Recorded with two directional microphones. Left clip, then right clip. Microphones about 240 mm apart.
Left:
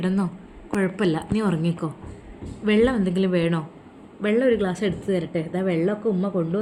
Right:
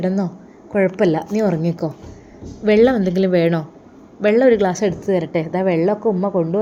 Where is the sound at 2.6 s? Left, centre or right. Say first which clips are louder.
Right 7 dB; centre.